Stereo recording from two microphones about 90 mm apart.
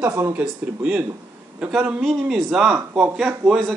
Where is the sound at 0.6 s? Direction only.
15° right (ahead or behind).